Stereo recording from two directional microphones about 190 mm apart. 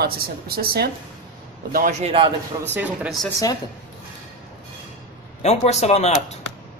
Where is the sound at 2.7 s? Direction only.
5° right (ahead or behind).